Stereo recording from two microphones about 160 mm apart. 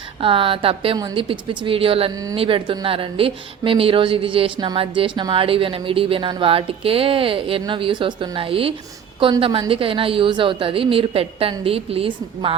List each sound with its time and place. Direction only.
0.2 s speech: 35° right (ahead or behind)